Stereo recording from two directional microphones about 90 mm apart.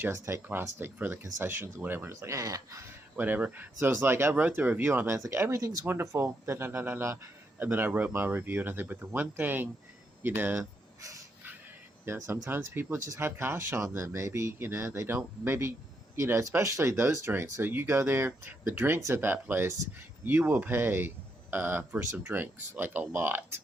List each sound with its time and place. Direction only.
0.0 s speech: 25° right (ahead or behind)
3.2 s speech: 20° right (ahead or behind)
12.0 s speech: 25° right (ahead or behind)